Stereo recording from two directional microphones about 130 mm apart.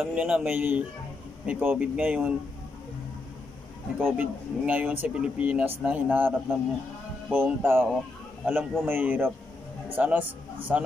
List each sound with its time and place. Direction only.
0.0 s speech: 5° right (ahead or behind)
4.0 s a man's voice: 15° right (ahead or behind)